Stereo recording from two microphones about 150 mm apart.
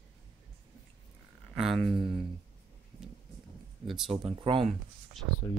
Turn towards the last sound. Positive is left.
turn(degrees=0)  # may be behind; listen again after turning